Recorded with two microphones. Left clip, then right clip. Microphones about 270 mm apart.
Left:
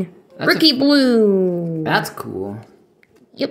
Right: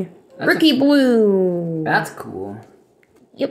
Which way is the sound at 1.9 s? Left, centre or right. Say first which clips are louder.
Even; left.